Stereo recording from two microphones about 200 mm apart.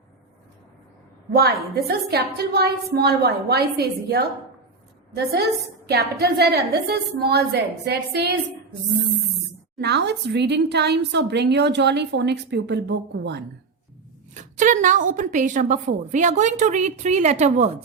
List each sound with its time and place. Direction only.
1.4 s a woman's voice: 50° right (ahead or behind)
5.8 s a woman's voice: 55° right (ahead or behind)
9.7 s a woman's voice: 55° right (ahead or behind)
14.3 s a woman's voice: 40° right (ahead or behind)